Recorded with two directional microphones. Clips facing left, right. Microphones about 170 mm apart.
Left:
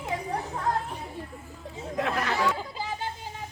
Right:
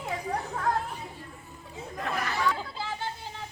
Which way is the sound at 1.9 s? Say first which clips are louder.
Left 4 dB; 85° left.